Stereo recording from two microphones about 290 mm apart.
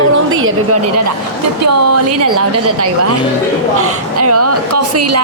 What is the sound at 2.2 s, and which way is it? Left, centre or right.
A woman's voice, right.